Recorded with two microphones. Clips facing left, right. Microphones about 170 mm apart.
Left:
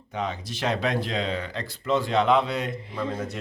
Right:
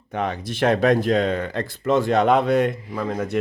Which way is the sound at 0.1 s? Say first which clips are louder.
Right 5 dB; 55° right (ahead or behind).